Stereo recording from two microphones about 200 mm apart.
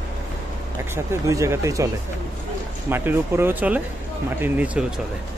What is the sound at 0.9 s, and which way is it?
Speech, 15° right (ahead or behind).